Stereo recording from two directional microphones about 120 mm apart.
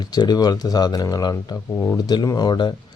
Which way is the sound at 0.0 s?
35° left (ahead or behind).